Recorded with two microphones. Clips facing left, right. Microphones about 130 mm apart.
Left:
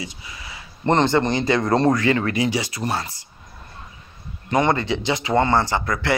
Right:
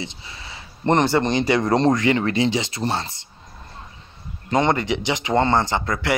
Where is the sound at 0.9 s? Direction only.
15° right (ahead or behind).